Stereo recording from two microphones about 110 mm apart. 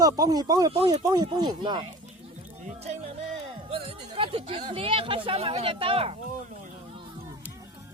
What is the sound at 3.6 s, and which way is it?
Speech, 55° right (ahead or behind).